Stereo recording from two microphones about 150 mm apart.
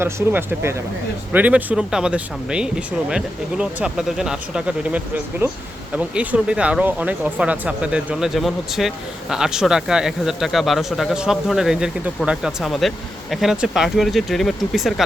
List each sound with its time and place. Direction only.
0.0 s speech: 15° right (ahead or behind)